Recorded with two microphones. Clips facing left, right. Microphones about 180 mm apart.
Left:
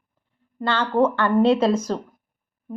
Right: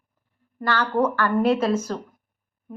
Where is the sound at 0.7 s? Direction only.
25° left (ahead or behind).